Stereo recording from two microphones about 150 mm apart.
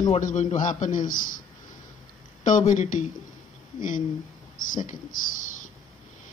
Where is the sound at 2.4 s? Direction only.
55° left (ahead or behind).